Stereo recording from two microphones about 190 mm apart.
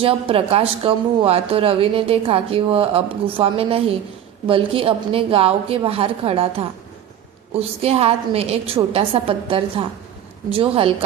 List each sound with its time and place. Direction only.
0.0 s a woman's voice: 30° right (ahead or behind)